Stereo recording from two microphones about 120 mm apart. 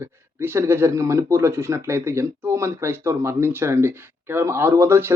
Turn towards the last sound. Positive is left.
turn(degrees=-20)  # may be behind; listen again after turning